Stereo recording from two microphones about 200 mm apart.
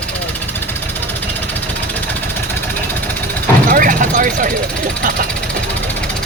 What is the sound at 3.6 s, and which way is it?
Vehicle, 45° right (ahead or behind).